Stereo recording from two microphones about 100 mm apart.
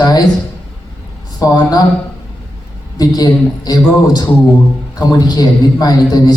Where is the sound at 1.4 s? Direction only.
40° left (ahead or behind).